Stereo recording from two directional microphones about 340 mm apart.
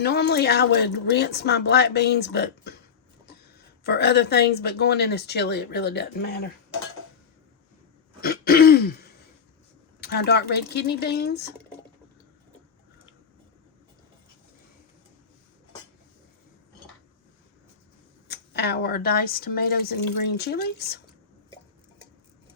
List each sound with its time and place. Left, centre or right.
0.0 s speech: left
3.8 s speech: left
8.2 s throat clearing: left
10.0 s speech: left
18.3 s speech: left